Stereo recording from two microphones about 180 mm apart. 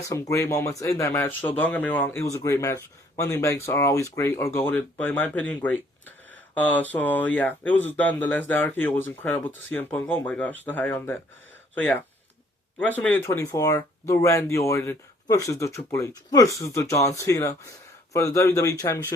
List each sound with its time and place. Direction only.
0.1 s speech: 15° left (ahead or behind)